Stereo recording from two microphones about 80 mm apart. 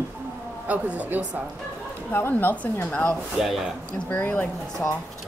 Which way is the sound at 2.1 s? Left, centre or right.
Left.